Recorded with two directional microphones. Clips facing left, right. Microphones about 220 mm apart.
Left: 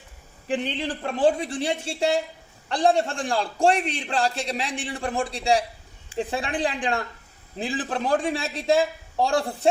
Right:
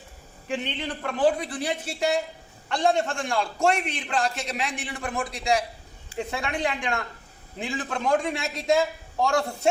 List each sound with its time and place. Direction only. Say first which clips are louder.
0.4 s a woman's voice: left 3 dB; 30° left (ahead or behind)